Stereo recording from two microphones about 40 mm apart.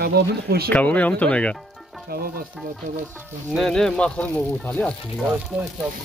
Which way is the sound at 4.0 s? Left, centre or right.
Left.